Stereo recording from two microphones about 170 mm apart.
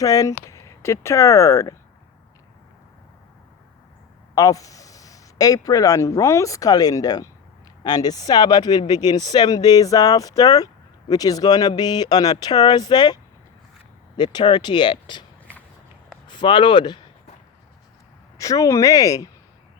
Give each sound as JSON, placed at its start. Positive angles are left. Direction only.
{"t": 0.0, "sound": "speech", "side_deg": 20}
{"t": 4.4, "sound": "speech", "side_deg": 20}
{"t": 14.2, "sound": "speech", "side_deg": 25}
{"t": 16.2, "sound": "speech", "side_deg": 25}
{"t": 18.3, "sound": "speech", "side_deg": 20}